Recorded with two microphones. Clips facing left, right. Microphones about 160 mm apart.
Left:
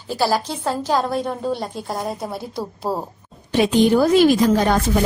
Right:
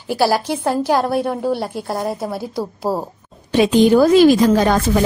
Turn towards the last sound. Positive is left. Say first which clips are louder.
# right 3 dB
turn(degrees=-90)